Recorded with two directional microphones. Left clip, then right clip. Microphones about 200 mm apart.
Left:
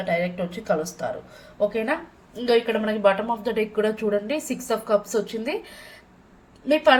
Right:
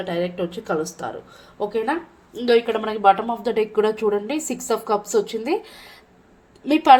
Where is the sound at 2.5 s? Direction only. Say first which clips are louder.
Right 2 dB; 45° right (ahead or behind).